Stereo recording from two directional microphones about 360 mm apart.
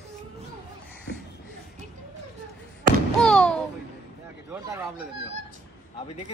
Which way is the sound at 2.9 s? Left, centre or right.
Right.